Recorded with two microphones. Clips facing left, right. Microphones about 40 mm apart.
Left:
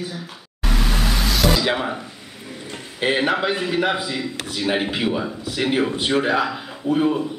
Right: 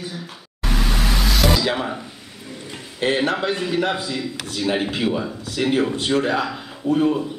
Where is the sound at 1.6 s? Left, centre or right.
Centre.